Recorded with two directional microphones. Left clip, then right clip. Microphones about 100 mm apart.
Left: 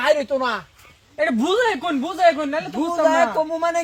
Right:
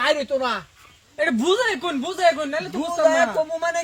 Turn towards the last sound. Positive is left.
turn(degrees=-5)  # may be behind; listen again after turning